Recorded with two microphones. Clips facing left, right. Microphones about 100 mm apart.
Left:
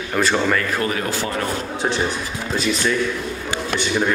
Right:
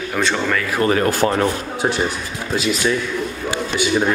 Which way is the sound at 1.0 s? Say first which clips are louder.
Right 7 dB; 50° right (ahead or behind).